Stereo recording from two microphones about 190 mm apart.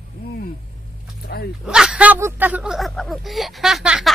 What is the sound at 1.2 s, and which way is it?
Dog, 60° left (ahead or behind).